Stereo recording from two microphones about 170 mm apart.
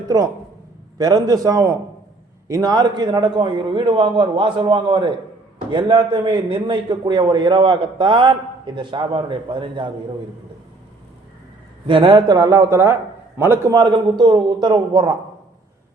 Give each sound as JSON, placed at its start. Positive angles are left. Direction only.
{"t": 0.9, "sound": "a man's voice", "side_deg": -20}
{"t": 11.9, "sound": "a man's voice", "side_deg": -30}